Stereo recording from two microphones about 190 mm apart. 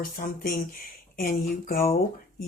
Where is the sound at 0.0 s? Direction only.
50° left (ahead or behind).